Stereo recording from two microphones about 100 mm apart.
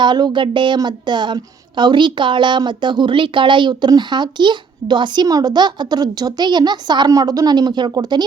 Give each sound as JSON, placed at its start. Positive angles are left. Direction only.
{"t": 0.0, "sound": "a woman's voice", "side_deg": -50}